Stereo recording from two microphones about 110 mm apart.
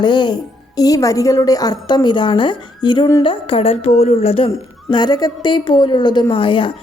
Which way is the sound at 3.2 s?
55° left (ahead or behind).